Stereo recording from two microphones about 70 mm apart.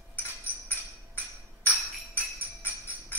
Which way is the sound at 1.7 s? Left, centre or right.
Left.